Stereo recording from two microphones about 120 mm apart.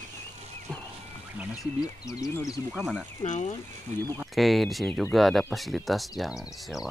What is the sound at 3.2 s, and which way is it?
Speech, 85° left.